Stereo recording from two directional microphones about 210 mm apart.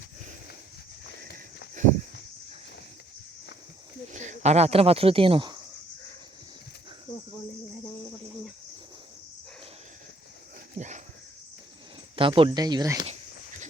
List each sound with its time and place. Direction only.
4.1 s speech: 35° right (ahead or behind)
10.8 s dog: 35° right (ahead or behind)
12.1 s speech: 25° right (ahead or behind)